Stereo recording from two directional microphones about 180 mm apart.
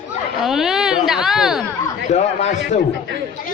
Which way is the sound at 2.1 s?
35° left (ahead or behind).